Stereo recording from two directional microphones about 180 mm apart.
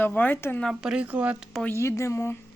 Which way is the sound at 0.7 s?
5° right (ahead or behind).